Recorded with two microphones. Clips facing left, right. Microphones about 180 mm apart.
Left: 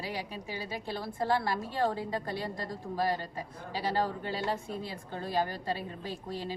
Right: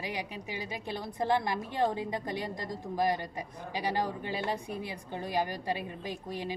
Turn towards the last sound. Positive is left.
turn(degrees=-15)  # may be behind; listen again after turning